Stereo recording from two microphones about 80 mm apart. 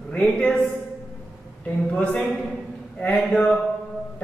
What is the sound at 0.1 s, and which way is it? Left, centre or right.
Speech, centre.